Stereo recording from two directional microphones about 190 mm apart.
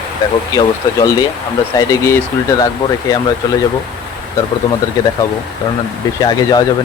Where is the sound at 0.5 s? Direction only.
20° left (ahead or behind).